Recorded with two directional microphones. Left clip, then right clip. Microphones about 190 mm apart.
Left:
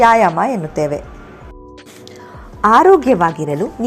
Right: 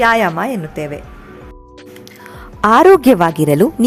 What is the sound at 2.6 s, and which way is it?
Speech, 40° right (ahead or behind).